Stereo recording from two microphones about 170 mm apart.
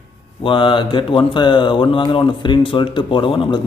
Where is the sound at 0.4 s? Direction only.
30° left (ahead or behind).